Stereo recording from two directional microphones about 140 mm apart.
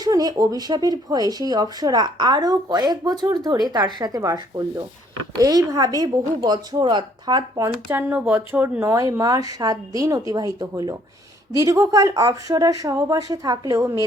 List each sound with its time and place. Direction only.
0.0 s speech: 25° right (ahead or behind)
7.9 s speech: 15° right (ahead or behind)